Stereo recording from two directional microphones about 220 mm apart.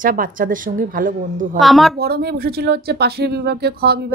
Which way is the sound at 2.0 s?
45° right (ahead or behind).